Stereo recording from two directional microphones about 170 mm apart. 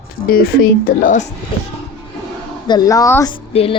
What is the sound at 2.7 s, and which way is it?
Speech, 20° left (ahead or behind).